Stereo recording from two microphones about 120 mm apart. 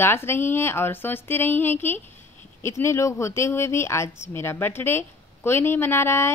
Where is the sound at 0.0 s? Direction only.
20° left (ahead or behind).